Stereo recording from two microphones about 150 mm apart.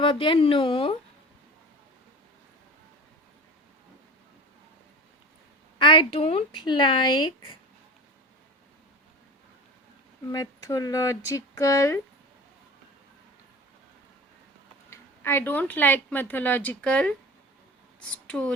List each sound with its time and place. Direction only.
0.0 s speech: 35° left (ahead or behind)
5.8 s speech: 35° left (ahead or behind)
10.3 s speech: 25° left (ahead or behind)
14.8 s speech: 15° left (ahead or behind)